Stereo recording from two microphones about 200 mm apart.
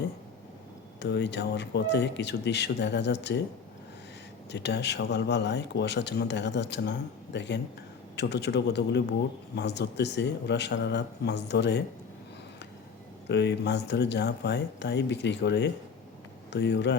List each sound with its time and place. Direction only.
0.9 s speech: 60° left (ahead or behind)
4.5 s speech: 60° left (ahead or behind)
13.2 s speech: 60° left (ahead or behind)